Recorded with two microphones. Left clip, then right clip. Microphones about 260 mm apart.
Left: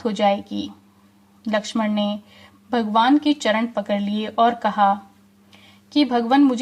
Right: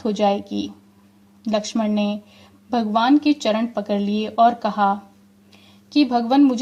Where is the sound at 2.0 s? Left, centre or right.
Left.